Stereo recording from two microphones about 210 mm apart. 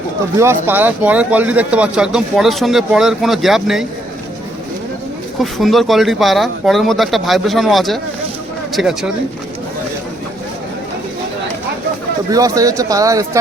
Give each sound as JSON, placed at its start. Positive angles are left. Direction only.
{"t": 0.3, "sound": "speech", "side_deg": -10}
{"t": 5.4, "sound": "speech", "side_deg": 0}
{"t": 12.3, "sound": "speech", "side_deg": -15}